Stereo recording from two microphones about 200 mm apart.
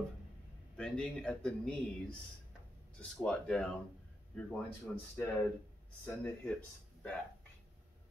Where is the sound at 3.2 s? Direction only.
5° left (ahead or behind).